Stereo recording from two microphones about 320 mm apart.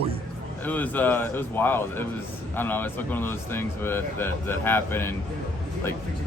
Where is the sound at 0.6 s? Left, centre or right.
Centre.